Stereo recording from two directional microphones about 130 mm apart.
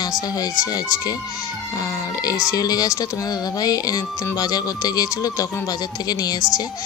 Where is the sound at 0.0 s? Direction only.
30° left (ahead or behind).